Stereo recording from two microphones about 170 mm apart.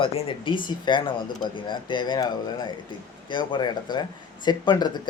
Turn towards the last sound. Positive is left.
turn(degrees=25)  # may be behind; listen again after turning